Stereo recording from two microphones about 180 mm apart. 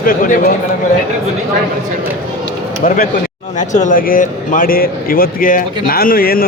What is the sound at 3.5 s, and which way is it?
Speech, 40° left (ahead or behind).